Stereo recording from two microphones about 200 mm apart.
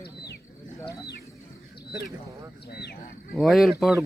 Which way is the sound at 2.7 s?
55° left (ahead or behind).